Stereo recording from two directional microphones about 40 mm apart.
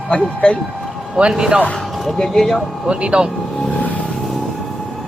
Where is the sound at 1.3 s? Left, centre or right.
Right.